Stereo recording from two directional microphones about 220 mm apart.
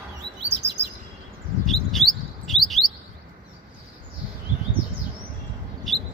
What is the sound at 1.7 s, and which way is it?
Bird, centre (ahead or behind).